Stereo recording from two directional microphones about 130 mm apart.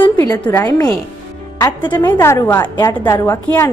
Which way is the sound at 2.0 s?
15° left (ahead or behind).